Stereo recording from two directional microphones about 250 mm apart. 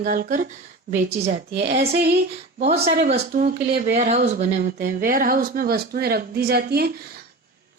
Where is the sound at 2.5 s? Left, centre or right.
Right.